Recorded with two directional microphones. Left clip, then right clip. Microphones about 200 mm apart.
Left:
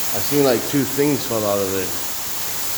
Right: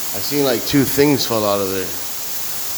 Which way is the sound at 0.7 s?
30° right (ahead or behind).